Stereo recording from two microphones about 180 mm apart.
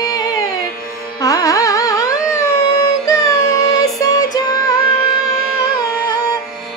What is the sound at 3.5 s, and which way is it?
Music, 20° left (ahead or behind).